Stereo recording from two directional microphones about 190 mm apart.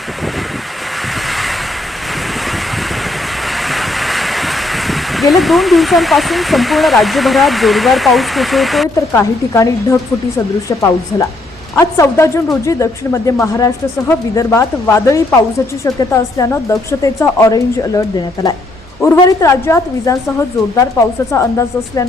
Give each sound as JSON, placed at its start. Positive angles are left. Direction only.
{"t": 1.3, "sound": "waves", "side_deg": 0}
{"t": 3.6, "sound": "speech", "side_deg": 0}
{"t": 9.1, "sound": "a woman's voice", "side_deg": 15}
{"t": 19.0, "sound": "a woman's voice", "side_deg": 15}